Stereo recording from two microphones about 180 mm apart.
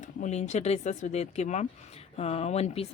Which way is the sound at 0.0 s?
40° left (ahead or behind).